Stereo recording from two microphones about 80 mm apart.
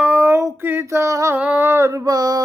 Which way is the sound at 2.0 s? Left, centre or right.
Right.